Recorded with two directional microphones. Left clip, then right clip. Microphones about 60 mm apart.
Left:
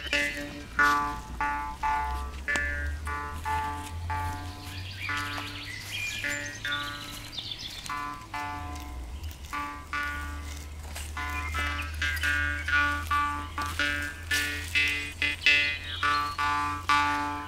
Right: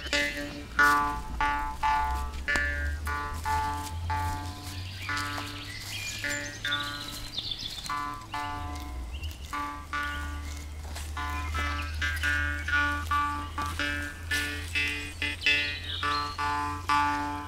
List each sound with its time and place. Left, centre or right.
0.0 s music: centre
0.8 s music: right; by 17.5 s left